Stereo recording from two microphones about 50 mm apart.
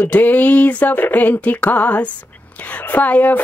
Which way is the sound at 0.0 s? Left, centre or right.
Left.